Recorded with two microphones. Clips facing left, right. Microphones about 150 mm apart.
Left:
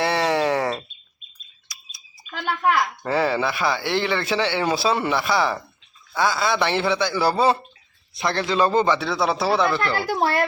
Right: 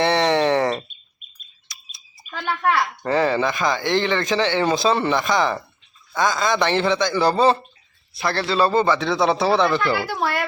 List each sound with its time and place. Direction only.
0.0 s a sound: 5° left (ahead or behind)
2.4 s a sound: centre (ahead or behind)
3.0 s speech: 10° left (ahead or behind)
8.1 s speech: 20° left (ahead or behind)
9.0 s speech: 5° left (ahead or behind)
10.1 s a child's voice: 40° left (ahead or behind)